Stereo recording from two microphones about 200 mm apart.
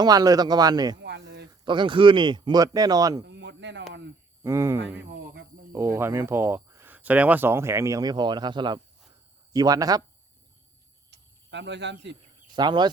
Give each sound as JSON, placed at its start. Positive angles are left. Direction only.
{"t": 0.0, "sound": "speech", "side_deg": -20}
{"t": 0.9, "sound": "a sound", "side_deg": -60}
{"t": 1.5, "sound": "speech", "side_deg": -25}
{"t": 3.2, "sound": "a sound", "side_deg": -60}
{"t": 4.4, "sound": "speech", "side_deg": -15}
{"t": 11.1, "sound": "cricket", "side_deg": -60}
{"t": 12.5, "sound": "speech", "side_deg": -20}